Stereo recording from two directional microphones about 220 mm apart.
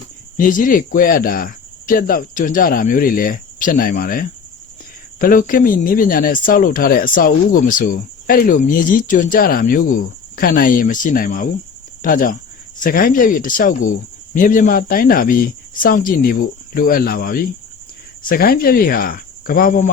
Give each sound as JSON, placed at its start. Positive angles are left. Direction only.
{"t": 0.3, "sound": "speech", "side_deg": 40}